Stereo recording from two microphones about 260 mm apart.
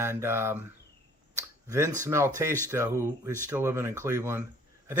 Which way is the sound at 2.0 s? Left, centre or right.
Centre.